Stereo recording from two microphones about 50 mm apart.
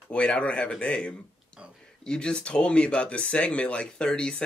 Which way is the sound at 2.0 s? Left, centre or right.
Centre.